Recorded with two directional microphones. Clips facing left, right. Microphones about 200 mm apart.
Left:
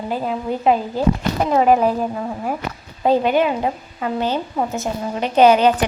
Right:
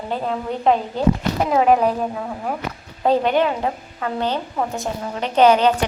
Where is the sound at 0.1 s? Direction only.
5° left (ahead or behind).